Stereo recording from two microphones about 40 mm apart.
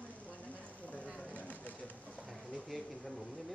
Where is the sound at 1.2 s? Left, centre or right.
Left.